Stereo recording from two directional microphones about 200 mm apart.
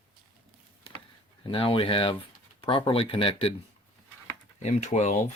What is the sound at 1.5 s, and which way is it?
Speech, 25° left (ahead or behind).